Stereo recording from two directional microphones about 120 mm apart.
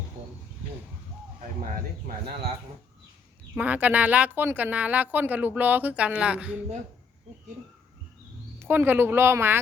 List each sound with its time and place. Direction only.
3.5 s speech: 15° right (ahead or behind)
8.5 s speech: 15° right (ahead or behind)